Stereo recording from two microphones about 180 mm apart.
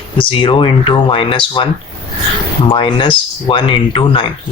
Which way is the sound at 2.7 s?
30° left (ahead or behind).